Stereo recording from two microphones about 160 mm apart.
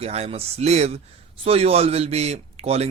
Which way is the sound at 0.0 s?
40° right (ahead or behind).